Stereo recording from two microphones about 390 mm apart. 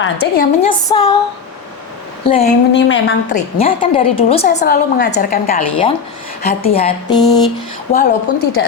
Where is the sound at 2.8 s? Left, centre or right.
Left.